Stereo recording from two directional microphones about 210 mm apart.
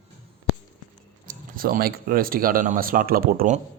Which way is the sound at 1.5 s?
45° right (ahead or behind).